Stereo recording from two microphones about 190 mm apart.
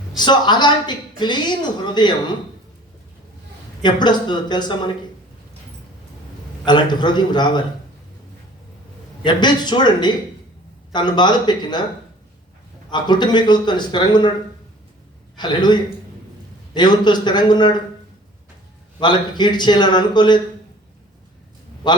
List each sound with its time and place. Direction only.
0.2 s speech: 25° left (ahead or behind)
3.8 s speech: 25° left (ahead or behind)
6.7 s speech: 25° left (ahead or behind)
9.2 s speech: 25° left (ahead or behind)
12.9 s speech: 25° left (ahead or behind)
15.4 s speech: 25° left (ahead or behind)
18.9 s speech: 25° left (ahead or behind)